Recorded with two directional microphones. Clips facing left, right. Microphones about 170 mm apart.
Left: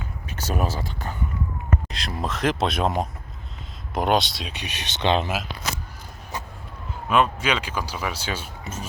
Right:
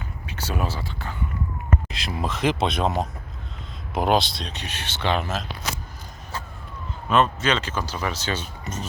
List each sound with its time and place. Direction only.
0.3 s speech: 45° left (ahead or behind)
1.9 s speech: centre (ahead or behind)
3.9 s speech: centre (ahead or behind); by 5.3 s 20° left (ahead or behind)
7.1 s speech: 10° left (ahead or behind)
8.6 s a sound: 10° left (ahead or behind)